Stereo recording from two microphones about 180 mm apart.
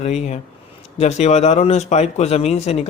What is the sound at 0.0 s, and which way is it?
Speech, 35° left (ahead or behind).